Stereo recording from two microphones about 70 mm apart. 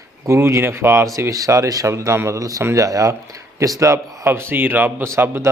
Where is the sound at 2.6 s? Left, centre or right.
Right.